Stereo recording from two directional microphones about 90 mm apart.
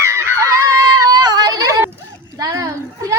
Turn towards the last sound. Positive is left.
turn(degrees=-40)  # may be behind; listen again after turning